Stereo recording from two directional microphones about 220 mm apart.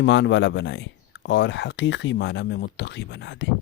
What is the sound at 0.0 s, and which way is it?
Speech, 55° left (ahead or behind).